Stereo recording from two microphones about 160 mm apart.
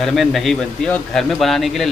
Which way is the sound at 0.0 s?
Centre (ahead or behind).